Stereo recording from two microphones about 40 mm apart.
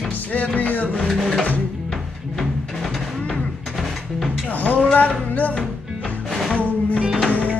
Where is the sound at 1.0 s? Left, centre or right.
Centre.